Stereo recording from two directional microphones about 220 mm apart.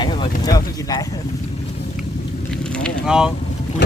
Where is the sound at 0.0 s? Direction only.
20° left (ahead or behind).